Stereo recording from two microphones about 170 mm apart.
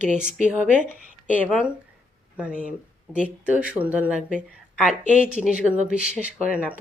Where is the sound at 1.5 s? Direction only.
Centre (ahead or behind).